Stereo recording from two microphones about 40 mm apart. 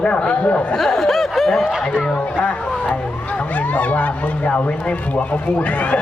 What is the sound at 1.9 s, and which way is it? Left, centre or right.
A man's voice, left.